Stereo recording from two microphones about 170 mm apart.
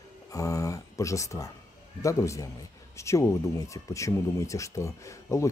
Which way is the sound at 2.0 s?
20° left (ahead or behind).